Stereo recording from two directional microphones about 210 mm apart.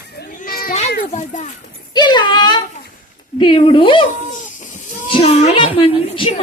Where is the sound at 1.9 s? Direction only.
20° left (ahead or behind).